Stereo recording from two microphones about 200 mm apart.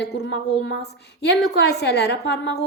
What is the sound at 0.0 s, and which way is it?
A woman's voice, 60° left (ahead or behind).